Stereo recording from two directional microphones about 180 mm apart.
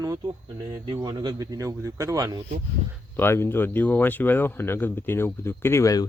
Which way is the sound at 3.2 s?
15° left (ahead or behind).